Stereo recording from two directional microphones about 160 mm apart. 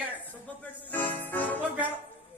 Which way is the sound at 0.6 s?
10° left (ahead or behind).